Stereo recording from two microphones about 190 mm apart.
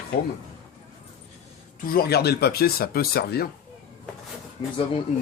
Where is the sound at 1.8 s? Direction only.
55° left (ahead or behind).